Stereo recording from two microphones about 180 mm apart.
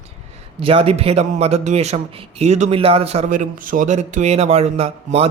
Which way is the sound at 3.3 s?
50° right (ahead or behind).